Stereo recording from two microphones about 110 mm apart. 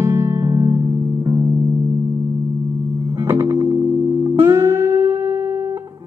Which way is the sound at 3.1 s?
25° right (ahead or behind).